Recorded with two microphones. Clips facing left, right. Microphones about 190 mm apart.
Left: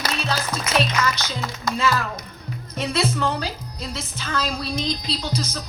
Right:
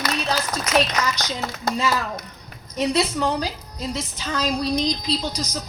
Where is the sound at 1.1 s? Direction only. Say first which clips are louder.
Right 1 dB; 40° right (ahead or behind).